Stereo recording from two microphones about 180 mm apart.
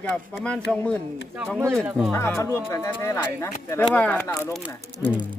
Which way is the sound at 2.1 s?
15° left (ahead or behind).